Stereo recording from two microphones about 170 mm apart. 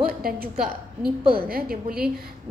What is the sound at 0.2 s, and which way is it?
A woman's voice, 60° right (ahead or behind).